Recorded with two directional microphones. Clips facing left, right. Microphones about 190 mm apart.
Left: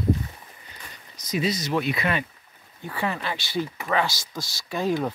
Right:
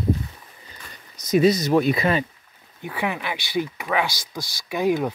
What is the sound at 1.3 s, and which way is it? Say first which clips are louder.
Speech: right 8 dB; 50° right (ahead or behind).